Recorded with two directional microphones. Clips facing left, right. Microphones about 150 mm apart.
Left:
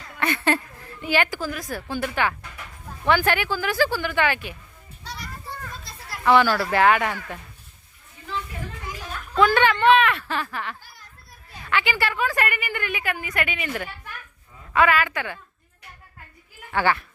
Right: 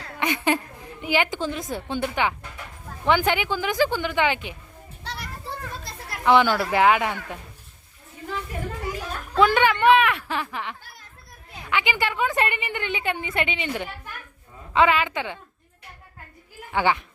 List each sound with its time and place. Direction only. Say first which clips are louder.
0.2 s a woman's voice: even; 15° right (ahead or behind)
5.7 s children playing: right 3 dB; 60° right (ahead or behind)
6.2 s speech: even; 20° right (ahead or behind)
9.4 s a woman's voice: even; 15° right (ahead or behind)
16.7 s speech: even; 15° right (ahead or behind)